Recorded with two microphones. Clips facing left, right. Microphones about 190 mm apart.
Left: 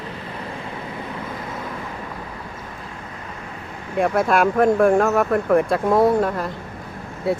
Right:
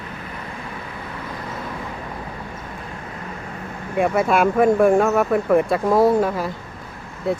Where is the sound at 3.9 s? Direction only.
5° right (ahead or behind).